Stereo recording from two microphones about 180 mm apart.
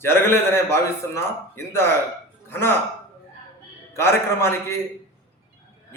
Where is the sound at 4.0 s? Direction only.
15° left (ahead or behind).